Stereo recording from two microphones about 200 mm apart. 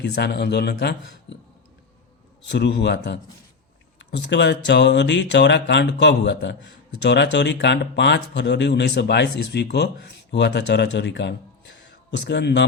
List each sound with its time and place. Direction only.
0.0 s a man's voice: 55° left (ahead or behind)
2.4 s a man's voice: 60° left (ahead or behind)